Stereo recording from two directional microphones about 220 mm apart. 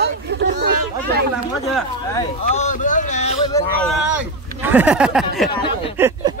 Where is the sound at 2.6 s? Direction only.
35° left (ahead or behind).